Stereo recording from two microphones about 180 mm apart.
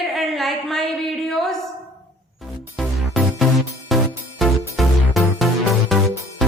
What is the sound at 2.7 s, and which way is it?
Music, centre (ahead or behind).